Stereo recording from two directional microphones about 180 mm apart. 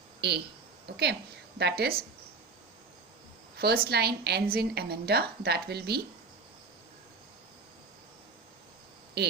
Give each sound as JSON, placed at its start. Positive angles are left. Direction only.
{"t": 0.2, "sound": "a woman's voice", "side_deg": -65}
{"t": 3.8, "sound": "a woman's voice", "side_deg": -65}
{"t": 9.2, "sound": "speech", "side_deg": -65}